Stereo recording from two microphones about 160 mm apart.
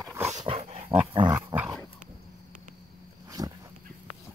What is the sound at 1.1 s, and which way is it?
Dog, 30° right (ahead or behind).